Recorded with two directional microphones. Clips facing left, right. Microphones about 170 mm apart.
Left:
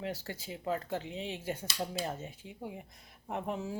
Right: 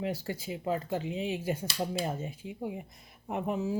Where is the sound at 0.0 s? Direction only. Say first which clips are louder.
Right 5 dB; 15° right (ahead or behind).